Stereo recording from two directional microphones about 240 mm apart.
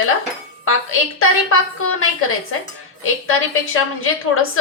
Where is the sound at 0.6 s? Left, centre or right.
Left.